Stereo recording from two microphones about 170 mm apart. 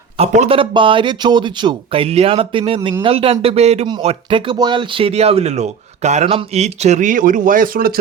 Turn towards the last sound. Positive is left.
turn(degrees=-60)  # may be behind; listen again after turning